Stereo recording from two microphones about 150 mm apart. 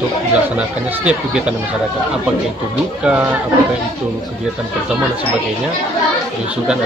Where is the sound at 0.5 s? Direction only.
10° right (ahead or behind).